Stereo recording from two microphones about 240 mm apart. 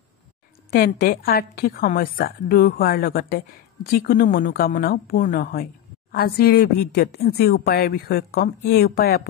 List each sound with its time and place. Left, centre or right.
0.7 s a woman's voice: left